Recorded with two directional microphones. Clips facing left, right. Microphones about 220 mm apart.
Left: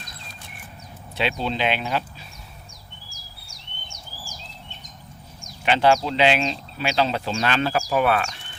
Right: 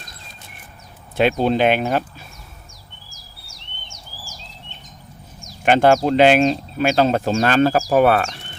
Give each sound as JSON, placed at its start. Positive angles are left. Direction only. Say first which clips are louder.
{"t": 1.1, "sound": "speech", "louder": "right 9 dB", "side_deg": -50}
{"t": 5.6, "sound": "speech", "louder": "right 5 dB", "side_deg": -50}